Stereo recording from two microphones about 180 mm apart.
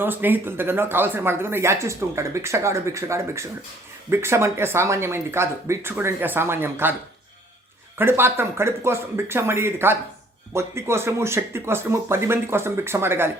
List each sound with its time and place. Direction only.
0.0 s speech: 10° right (ahead or behind)
7.9 s speech: 15° right (ahead or behind)